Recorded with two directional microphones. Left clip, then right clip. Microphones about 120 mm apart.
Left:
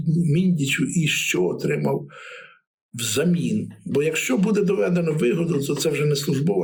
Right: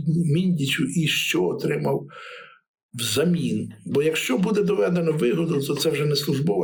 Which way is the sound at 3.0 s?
15° right (ahead or behind).